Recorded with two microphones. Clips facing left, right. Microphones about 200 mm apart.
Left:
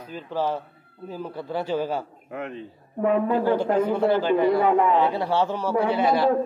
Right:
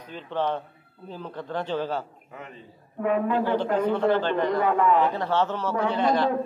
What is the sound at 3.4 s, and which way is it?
Speech, 10° left (ahead or behind).